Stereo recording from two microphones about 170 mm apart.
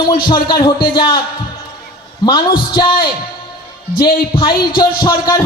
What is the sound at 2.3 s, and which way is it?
Speech, 25° left (ahead or behind).